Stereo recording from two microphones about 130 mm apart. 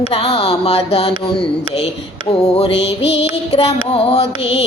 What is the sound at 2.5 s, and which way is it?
Child singing, 50° left (ahead or behind).